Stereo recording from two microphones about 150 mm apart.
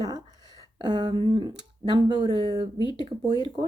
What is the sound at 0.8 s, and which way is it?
Speech, 30° right (ahead or behind).